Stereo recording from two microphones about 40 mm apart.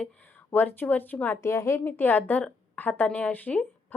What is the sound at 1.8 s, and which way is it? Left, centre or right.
A woman's voice, left.